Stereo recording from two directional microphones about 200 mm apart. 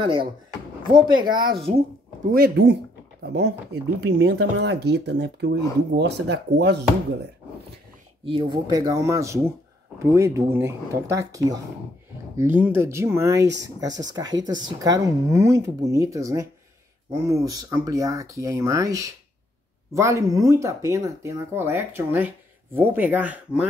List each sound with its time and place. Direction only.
0.0 s speech: 25° right (ahead or behind)
2.3 s speech: 55° right (ahead or behind)
8.3 s speech: 25° right (ahead or behind); by 23.7 s 5° right (ahead or behind)